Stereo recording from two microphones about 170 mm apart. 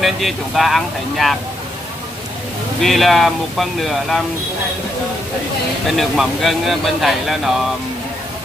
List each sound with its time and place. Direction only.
0.0 s speech: centre (ahead or behind)
2.8 s speech: centre (ahead or behind)
5.9 s speech: centre (ahead or behind)